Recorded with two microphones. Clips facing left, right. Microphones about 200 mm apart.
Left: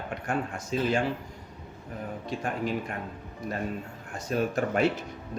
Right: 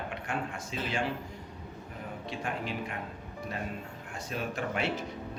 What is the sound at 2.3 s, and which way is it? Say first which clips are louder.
Speech: left 5 dB; 45° left (ahead or behind).